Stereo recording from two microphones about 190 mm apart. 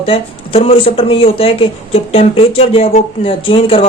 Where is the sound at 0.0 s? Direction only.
30° left (ahead or behind).